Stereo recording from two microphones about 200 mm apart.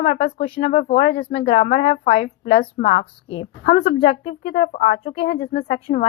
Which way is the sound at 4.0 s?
50° left (ahead or behind).